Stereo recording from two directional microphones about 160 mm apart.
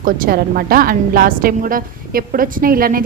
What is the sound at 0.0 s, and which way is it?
A woman's voice, 65° right (ahead or behind).